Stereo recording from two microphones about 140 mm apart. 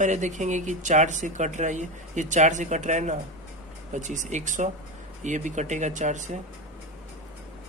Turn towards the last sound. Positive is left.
turn(degrees=-60)  # may be behind; listen again after turning